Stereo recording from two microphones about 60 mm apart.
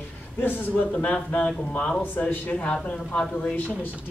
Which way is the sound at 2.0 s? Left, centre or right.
Left.